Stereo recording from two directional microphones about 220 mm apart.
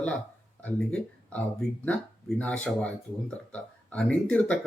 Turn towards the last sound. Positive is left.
turn(degrees=5)  # may be behind; listen again after turning